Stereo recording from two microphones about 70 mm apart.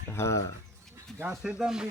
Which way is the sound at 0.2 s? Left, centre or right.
Left.